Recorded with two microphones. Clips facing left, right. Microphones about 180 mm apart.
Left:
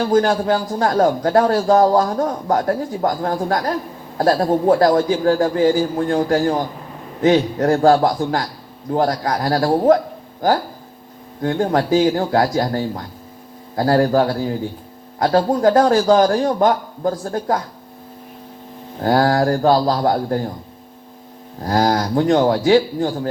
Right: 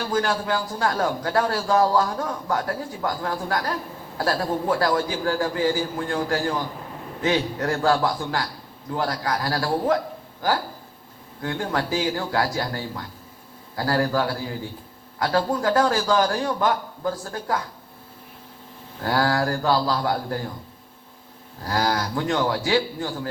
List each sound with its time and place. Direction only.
0.0 s a man's voice: 35° left (ahead or behind)
11.4 s a man's voice: 35° left (ahead or behind)
18.9 s a man's voice: 35° left (ahead or behind)
21.6 s a man's voice: 35° left (ahead or behind)